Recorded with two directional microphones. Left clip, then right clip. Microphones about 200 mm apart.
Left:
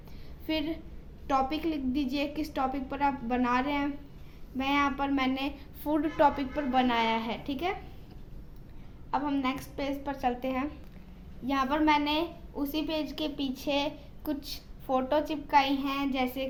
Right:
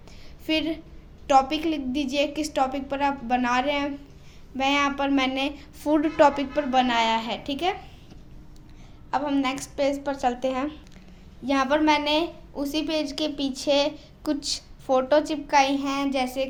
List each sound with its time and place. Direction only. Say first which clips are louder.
0.4 s a woman's voice: right 7 dB; 35° right (ahead or behind)
9.0 s a woman's voice: right 5 dB; 30° right (ahead or behind)